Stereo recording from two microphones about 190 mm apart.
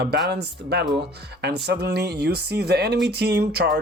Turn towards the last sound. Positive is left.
turn(degrees=-60)  # may be behind; listen again after turning